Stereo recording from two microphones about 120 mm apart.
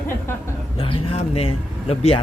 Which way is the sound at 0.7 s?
50° left (ahead or behind).